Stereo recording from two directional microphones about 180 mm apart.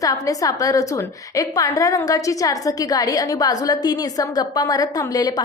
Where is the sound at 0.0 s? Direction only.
20° left (ahead or behind).